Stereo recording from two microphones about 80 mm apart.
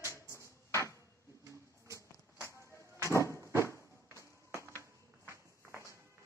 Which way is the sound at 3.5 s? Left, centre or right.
Left.